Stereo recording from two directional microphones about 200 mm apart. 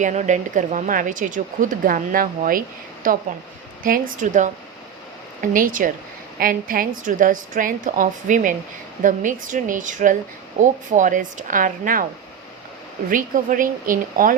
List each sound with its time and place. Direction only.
0.0 s speech: 35° right (ahead or behind)
4.2 s a woman's voice: 40° right (ahead or behind)
13.1 s a woman's voice: 40° right (ahead or behind)